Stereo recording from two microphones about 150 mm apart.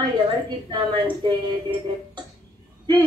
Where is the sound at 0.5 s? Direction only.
35° right (ahead or behind).